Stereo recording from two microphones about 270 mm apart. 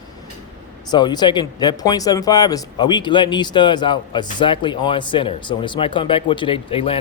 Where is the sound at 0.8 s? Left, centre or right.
Centre.